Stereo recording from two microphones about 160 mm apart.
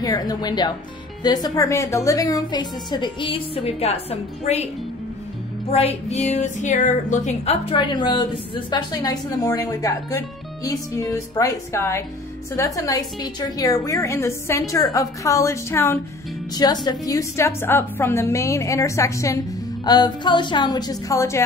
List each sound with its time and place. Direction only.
0.0 s a woman's voice: 25° left (ahead or behind); by 4.6 s 40° left (ahead or behind)
5.7 s a woman's voice: 40° left (ahead or behind)
7.7 s a woman's voice: 30° left (ahead or behind)